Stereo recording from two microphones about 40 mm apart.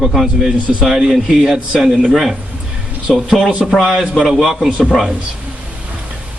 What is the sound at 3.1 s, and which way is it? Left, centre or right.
Speech, centre.